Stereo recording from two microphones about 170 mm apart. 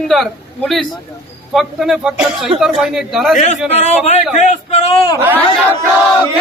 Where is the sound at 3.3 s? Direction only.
45° left (ahead or behind).